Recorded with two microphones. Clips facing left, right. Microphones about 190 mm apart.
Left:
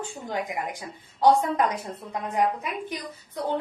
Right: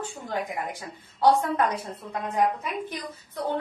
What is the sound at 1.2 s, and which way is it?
A woman's voice, 15° left (ahead or behind).